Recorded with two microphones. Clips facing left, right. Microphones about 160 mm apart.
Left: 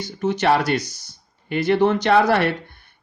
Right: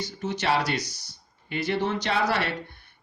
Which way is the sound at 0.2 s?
55° left (ahead or behind).